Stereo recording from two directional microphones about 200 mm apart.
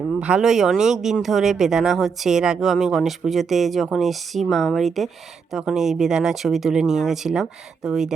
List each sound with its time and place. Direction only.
0.2 s speech: 5° right (ahead or behind)